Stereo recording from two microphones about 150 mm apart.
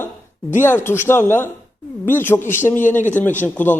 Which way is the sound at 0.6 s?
15° left (ahead or behind).